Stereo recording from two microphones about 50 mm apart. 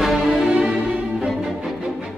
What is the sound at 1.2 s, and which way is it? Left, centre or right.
Music, centre.